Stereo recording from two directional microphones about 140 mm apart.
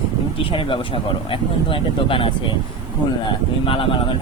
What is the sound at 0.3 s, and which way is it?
Speech, 40° left (ahead or behind).